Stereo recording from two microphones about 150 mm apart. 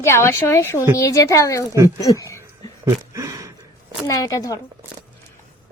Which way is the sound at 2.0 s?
20° left (ahead or behind).